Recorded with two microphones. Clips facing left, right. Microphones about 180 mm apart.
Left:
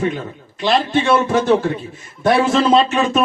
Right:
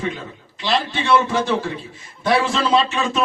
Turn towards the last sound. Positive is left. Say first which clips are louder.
# left 4 dB
turn(degrees=50)  # may be behind; listen again after turning